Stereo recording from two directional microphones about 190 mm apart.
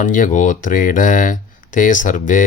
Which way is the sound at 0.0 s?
45° left (ahead or behind).